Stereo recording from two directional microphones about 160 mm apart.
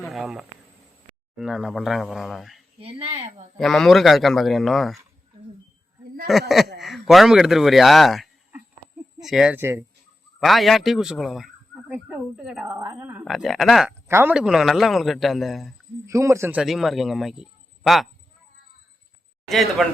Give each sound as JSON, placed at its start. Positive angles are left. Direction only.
{"t": 0.0, "sound": "speech", "side_deg": 0}
{"t": 2.8, "sound": "speech", "side_deg": -40}
{"t": 3.6, "sound": "speech", "side_deg": 0}
{"t": 6.3, "sound": "speech", "side_deg": 0}
{"t": 9.6, "sound": "a woman's voice", "side_deg": -15}
{"t": 10.4, "sound": "speech", "side_deg": 0}
{"t": 12.7, "sound": "a woman's voice", "side_deg": -20}
{"t": 13.2, "sound": "speech", "side_deg": 0}
{"t": 14.1, "sound": "speech", "side_deg": -15}
{"t": 16.0, "sound": "speech", "side_deg": -20}
{"t": 16.6, "sound": "a man's voice", "side_deg": 0}
{"t": 19.5, "sound": "speech", "side_deg": 0}